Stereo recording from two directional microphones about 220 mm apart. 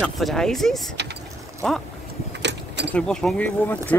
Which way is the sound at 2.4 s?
50° right (ahead or behind).